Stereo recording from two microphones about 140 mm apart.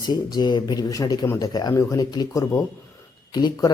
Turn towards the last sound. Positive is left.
turn(degrees=30)  # may be behind; listen again after turning